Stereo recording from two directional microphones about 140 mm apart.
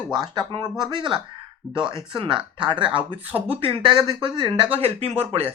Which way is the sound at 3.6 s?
35° right (ahead or behind).